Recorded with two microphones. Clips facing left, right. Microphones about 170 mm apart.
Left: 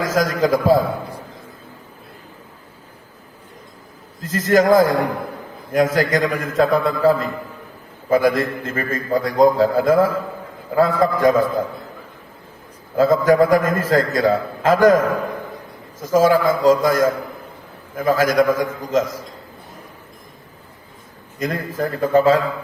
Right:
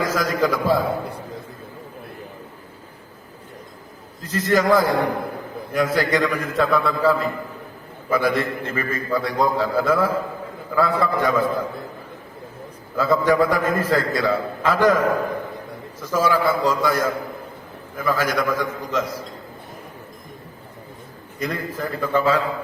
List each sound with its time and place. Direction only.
0.0 s a man's voice: 45° left (ahead or behind)
4.2 s a man's voice: 45° left (ahead or behind)
13.0 s a man's voice: 45° left (ahead or behind)
21.3 s a man's voice: 45° left (ahead or behind)